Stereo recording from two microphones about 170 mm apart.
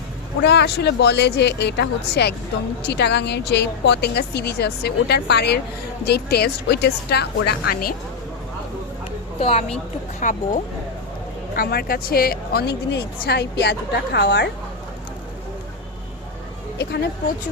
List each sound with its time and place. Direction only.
0.4 s a woman's voice: 80° left
7.7 s speech: 60° left (ahead or behind)
9.4 s a woman's voice: 35° left (ahead or behind)
10.2 s speech: 50° left (ahead or behind)
11.5 s speech: 60° left (ahead or behind); by 14.5 s 90° left
16.7 s a woman's voice: 80° left